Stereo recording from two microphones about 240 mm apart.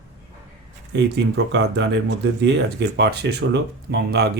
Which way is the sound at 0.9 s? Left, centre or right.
Right.